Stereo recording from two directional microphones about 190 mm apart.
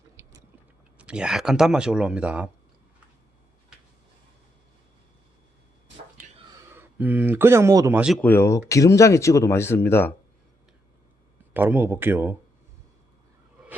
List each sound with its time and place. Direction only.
0.2 s chewing: 15° right (ahead or behind)
0.9 s speech: 5° right (ahead or behind)
6.7 s speech: 10° right (ahead or behind)
8.2 s speech: 15° left (ahead or behind)
11.5 s speech: 10° right (ahead or behind)